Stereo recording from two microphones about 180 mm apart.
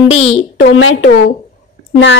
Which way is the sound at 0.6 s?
90° left.